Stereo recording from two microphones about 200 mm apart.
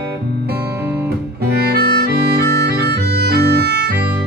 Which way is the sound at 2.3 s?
55° right (ahead or behind).